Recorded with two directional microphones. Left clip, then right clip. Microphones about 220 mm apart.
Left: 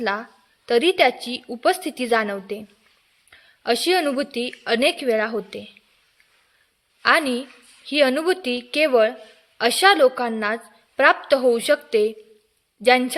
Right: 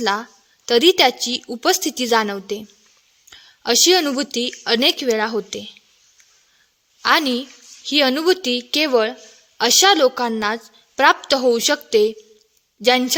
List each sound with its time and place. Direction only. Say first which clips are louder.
0.0 s a woman's voice: right 4 dB; 45° right (ahead or behind)
7.0 s a woman's voice: right 1 dB; 50° right (ahead or behind)